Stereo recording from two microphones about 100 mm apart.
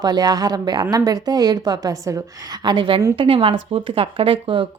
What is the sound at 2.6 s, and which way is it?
A woman's voice, 45° right (ahead or behind).